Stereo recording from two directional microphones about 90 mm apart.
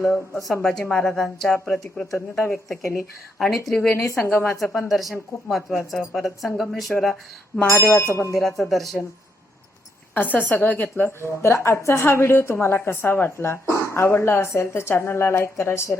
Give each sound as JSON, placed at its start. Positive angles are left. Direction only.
{"t": 0.1, "sound": "speech", "side_deg": 5}
{"t": 3.3, "sound": "speech", "side_deg": 5}
{"t": 7.7, "sound": "a woman's voice", "side_deg": 30}
{"t": 8.3, "sound": "speech", "side_deg": 5}
{"t": 10.2, "sound": "a woman's voice", "side_deg": 20}